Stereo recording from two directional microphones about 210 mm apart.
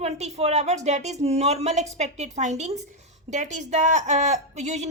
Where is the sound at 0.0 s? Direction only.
30° right (ahead or behind).